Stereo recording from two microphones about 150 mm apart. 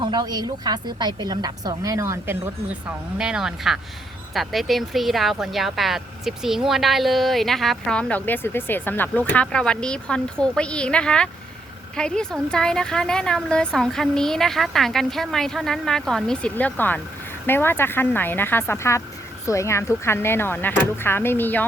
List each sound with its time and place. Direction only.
0.0 s a woman's voice: 30° right (ahead or behind)
3.2 s speech: 5° right (ahead or behind); by 21.6 s 15° left (ahead or behind)